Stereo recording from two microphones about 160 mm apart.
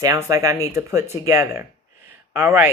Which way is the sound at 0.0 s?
20° right (ahead or behind).